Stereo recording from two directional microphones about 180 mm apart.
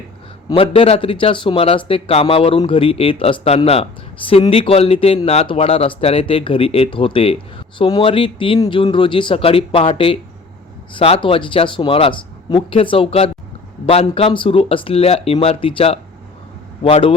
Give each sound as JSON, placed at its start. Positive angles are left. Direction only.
{"t": 0.4, "sound": "speech", "side_deg": 30}